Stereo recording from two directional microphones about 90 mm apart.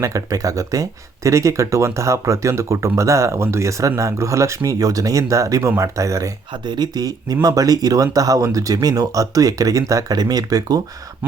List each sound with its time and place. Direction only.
0.0 s speech: 40° right (ahead or behind)
6.7 s speech: 50° right (ahead or behind)